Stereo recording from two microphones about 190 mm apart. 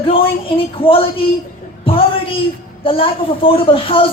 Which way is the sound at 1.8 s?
30° left (ahead or behind).